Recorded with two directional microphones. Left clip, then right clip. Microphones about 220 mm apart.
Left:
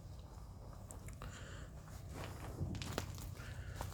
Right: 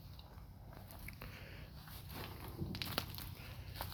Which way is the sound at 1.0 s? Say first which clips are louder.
Right 2 dB; centre (ahead or behind).